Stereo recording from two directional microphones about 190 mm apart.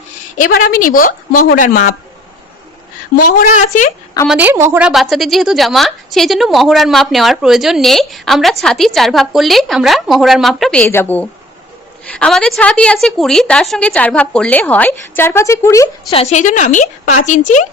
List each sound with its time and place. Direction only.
0.3 s a woman's voice: 45° left (ahead or behind)
3.3 s a woman's voice: 45° left (ahead or behind)
4.3 s a woman's voice: 10° right (ahead or behind); by 16.1 s 15° left (ahead or behind)
16.3 s a woman's voice: 40° left (ahead or behind)